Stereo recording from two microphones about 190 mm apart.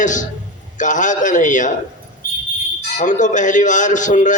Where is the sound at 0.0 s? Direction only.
40° left (ahead or behind).